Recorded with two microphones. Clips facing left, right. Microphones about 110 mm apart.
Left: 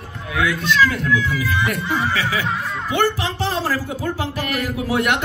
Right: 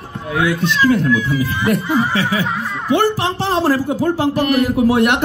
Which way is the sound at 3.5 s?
30° right (ahead or behind).